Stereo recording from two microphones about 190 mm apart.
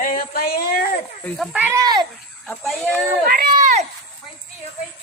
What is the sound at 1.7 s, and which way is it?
Speech, 20° right (ahead or behind).